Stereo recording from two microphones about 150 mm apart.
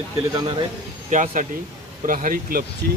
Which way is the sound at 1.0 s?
55° right (ahead or behind).